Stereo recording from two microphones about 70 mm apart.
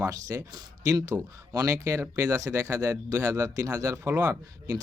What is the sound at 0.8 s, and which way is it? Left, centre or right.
Speech, right.